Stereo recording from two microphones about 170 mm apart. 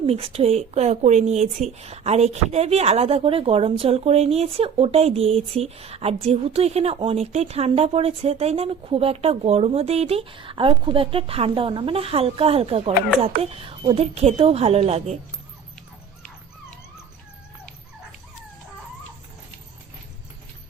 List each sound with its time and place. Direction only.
0.0 s speech: 35° right (ahead or behind)